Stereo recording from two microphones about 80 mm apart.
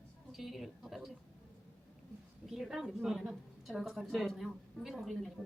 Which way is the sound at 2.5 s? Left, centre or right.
Centre.